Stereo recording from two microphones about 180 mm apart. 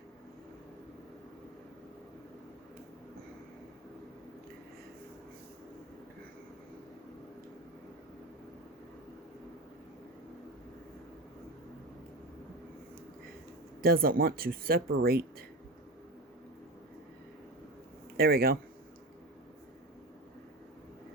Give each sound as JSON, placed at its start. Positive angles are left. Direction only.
{"t": 13.8, "sound": "speech", "side_deg": -55}
{"t": 18.2, "sound": "speech", "side_deg": -55}